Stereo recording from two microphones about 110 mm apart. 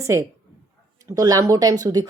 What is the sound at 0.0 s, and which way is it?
A woman's voice, 25° right (ahead or behind).